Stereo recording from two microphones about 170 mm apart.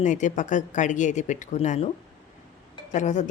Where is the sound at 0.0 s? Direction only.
45° left (ahead or behind).